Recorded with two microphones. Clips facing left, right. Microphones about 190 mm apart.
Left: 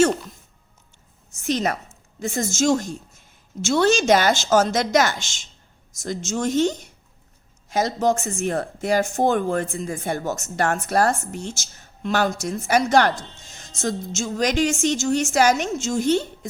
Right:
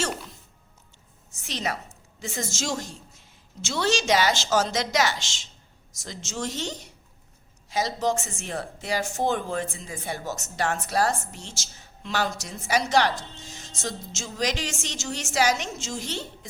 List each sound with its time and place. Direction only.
1.4 s a woman's voice: 50° left (ahead or behind)